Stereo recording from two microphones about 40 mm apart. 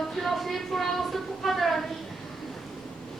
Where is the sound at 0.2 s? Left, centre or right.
Centre.